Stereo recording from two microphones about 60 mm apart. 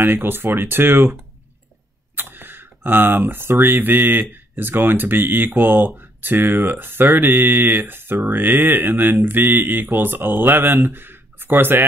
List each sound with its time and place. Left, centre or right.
0.0 s speech: right
2.1 s speech: right